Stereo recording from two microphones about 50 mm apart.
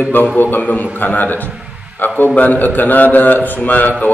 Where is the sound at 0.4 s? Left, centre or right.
Left.